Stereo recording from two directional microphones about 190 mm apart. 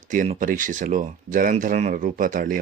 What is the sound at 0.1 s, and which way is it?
Speech, 45° right (ahead or behind).